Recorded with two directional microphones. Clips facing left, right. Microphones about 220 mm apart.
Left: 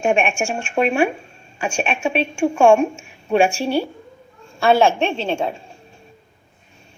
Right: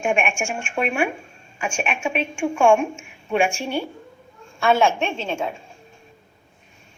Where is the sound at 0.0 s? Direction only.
35° left (ahead or behind).